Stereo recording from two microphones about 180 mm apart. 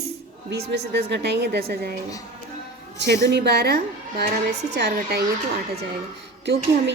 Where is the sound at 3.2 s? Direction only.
70° right (ahead or behind).